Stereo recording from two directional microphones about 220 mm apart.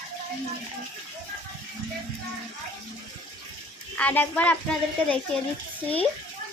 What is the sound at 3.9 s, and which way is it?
A woman's voice, 5° left (ahead or behind).